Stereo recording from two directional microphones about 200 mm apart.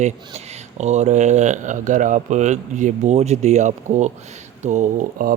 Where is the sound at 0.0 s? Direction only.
35° right (ahead or behind).